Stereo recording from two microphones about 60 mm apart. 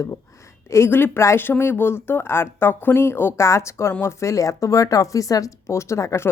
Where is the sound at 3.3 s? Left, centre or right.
Left.